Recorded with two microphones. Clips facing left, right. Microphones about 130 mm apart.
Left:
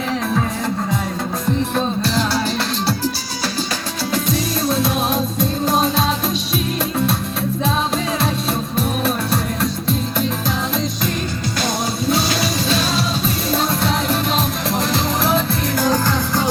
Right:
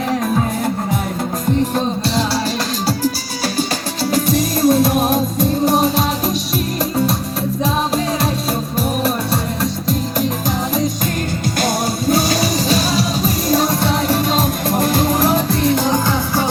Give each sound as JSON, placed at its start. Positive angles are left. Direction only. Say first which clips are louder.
{"t": 2.0, "sound": "music", "louder": "right 1 dB", "side_deg": -35}
{"t": 4.1, "sound": "music", "louder": "right 4 dB", "side_deg": -45}
{"t": 9.3, "sound": "music", "louder": "right 1 dB", "side_deg": -35}
{"t": 11.6, "sound": "music", "louder": "right 3 dB", "side_deg": -45}
{"t": 15.7, "sound": "music", "louder": "right 2 dB", "side_deg": -20}